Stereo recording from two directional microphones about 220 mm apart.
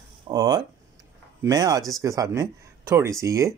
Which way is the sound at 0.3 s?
15° right (ahead or behind).